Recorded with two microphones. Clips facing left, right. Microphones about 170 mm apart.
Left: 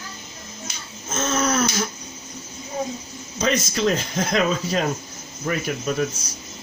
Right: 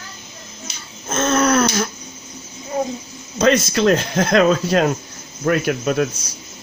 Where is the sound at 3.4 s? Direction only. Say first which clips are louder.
Right 6 dB; 70° right (ahead or behind).